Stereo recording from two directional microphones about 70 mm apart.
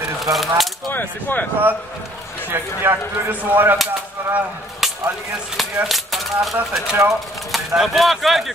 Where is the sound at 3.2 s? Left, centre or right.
Right.